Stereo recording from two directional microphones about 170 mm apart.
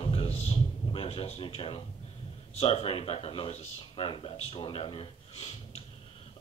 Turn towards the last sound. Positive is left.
turn(degrees=35)  # may be behind; listen again after turning